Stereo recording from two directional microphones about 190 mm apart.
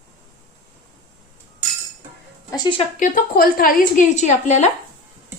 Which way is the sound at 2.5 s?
25° left (ahead or behind).